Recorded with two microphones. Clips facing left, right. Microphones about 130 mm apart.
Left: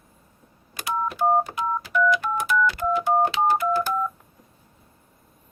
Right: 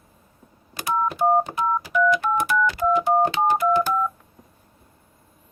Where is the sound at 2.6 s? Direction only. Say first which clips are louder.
Right 2 dB; 15° right (ahead or behind).